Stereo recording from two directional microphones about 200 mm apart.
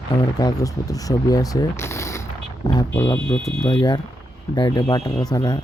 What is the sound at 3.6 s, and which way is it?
Speech, 20° left (ahead or behind).